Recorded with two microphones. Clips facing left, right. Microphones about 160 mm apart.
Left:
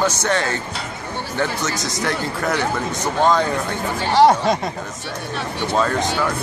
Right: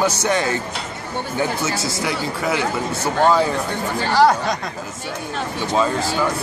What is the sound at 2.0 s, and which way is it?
Speech, 5° right (ahead or behind).